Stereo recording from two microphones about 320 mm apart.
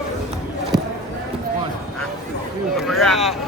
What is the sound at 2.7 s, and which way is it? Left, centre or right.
Speech, centre.